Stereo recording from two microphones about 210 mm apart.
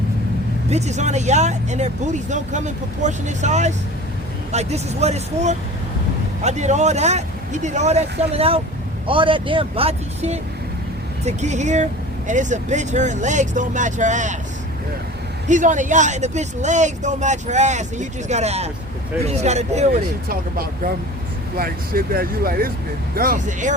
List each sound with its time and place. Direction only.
0.7 s speech: 30° right (ahead or behind)
15.4 s speech: 35° right (ahead or behind)